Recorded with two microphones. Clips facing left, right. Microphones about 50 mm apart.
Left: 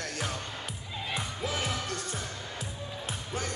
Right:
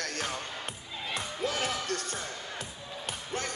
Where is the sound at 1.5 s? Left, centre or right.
Centre.